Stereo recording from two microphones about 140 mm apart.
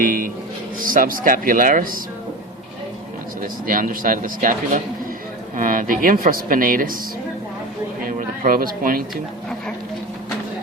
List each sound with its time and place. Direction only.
0.0 s speech: 80° right
3.4 s speech: 80° right
8.0 s a sound: 90° right